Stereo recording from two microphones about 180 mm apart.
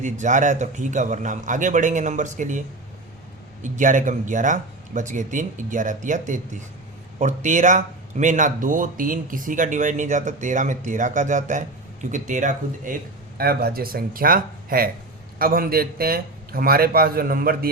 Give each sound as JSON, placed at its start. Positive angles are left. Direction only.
{"t": 0.0, "sound": "a man's voice", "side_deg": -45}